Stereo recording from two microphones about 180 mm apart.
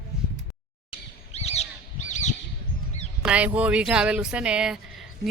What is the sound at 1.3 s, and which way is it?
Bird, 35° left (ahead or behind).